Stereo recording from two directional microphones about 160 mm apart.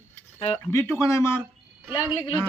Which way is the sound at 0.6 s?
20° left (ahead or behind).